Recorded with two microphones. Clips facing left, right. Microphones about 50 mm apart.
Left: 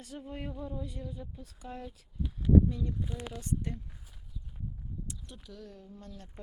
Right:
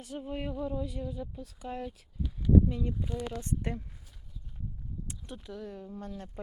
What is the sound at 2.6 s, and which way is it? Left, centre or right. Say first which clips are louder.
Speech: right 2 dB; right.